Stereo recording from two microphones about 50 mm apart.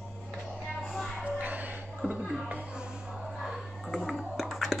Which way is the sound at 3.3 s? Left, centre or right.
Centre.